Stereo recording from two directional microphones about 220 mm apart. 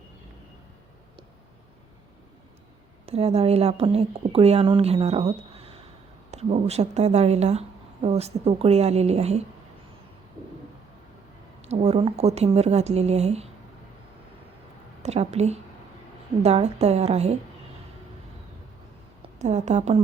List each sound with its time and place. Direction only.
3.1 s speech: 30° right (ahead or behind)
11.7 s speech: 30° right (ahead or behind)
15.0 s speech: 30° right (ahead or behind)
19.4 s a woman's voice: 30° right (ahead or behind)